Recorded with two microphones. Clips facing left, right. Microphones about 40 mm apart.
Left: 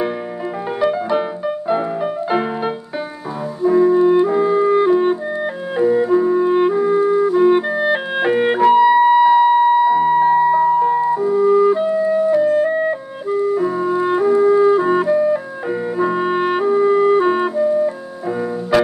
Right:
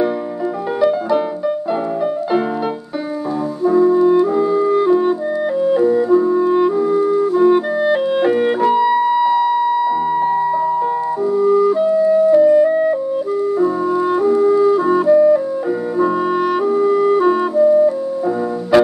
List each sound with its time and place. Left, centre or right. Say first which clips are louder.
0.7 s music: right 2 dB; left
3.6 s clarinet: even; centre
12.6 s music: right 4 dB; centre
16.0 s clarinet: right 1 dB; left
17.6 s music: right 7 dB; centre